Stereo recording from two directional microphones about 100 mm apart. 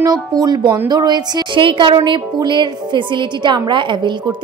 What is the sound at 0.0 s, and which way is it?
A woman's voice, 40° right (ahead or behind).